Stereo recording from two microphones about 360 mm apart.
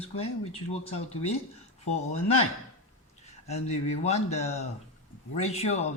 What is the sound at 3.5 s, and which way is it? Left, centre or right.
Speech, centre.